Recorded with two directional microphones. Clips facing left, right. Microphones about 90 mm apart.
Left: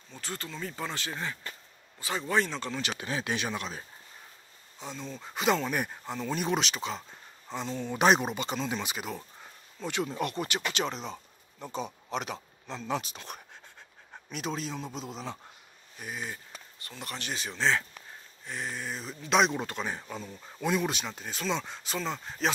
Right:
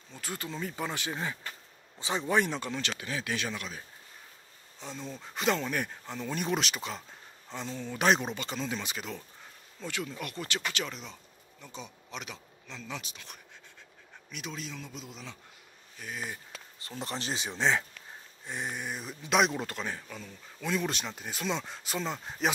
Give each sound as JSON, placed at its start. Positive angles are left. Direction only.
{"t": 0.1, "sound": "speech", "side_deg": -10}
{"t": 3.0, "sound": "speech", "side_deg": 30}
{"t": 4.9, "sound": "speech", "side_deg": -10}
{"t": 5.2, "sound": "speech", "side_deg": 10}
{"t": 6.2, "sound": "speech", "side_deg": 0}
{"t": 7.9, "sound": "speech", "side_deg": 20}
{"t": 9.8, "sound": "speech", "side_deg": 25}
{"t": 11.6, "sound": "speech", "side_deg": 45}
{"t": 17.0, "sound": "speech", "side_deg": -25}
{"t": 19.9, "sound": "speech", "side_deg": 20}
{"t": 20.9, "sound": "speech", "side_deg": 0}